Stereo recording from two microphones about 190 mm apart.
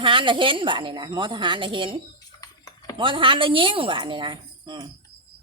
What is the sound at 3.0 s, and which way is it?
Speech, 25° right (ahead or behind).